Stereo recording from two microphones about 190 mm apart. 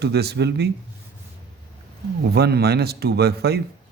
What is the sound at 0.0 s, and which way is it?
Speech, 60° right (ahead or behind).